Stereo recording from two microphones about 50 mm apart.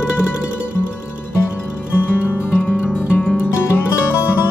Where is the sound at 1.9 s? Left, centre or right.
Left.